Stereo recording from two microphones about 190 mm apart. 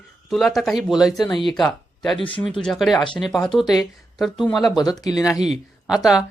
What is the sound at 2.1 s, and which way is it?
Speech, 25° left (ahead or behind).